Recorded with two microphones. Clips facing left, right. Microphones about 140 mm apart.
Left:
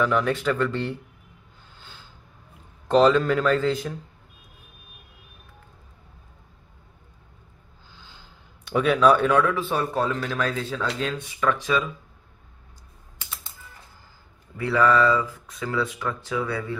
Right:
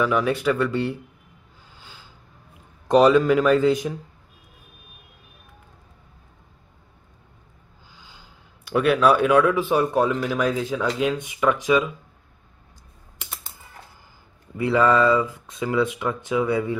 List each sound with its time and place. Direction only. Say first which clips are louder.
0.0 s speech: right 2 dB; 10° right (ahead or behind)
1.8 s a sound: right 1 dB; 10° right (ahead or behind)
2.9 s speech: right 3 dB; 10° right (ahead or behind)
7.9 s speech: even; 10° right (ahead or behind)
14.6 s speech: right 2 dB; 20° right (ahead or behind)